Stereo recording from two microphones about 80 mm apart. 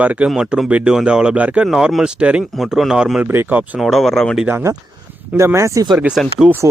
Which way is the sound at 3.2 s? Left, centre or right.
Right.